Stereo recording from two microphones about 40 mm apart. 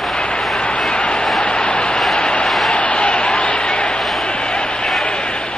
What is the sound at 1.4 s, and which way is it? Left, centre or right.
Vehicle, left.